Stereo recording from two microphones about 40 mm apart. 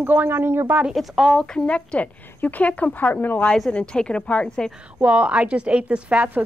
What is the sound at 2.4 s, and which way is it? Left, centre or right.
Speech, left.